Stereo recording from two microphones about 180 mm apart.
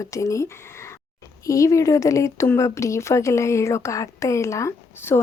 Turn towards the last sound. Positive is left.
turn(degrees=15)  # may be behind; listen again after turning